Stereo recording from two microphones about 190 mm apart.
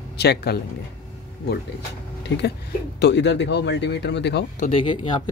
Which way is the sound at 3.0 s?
65° left (ahead or behind).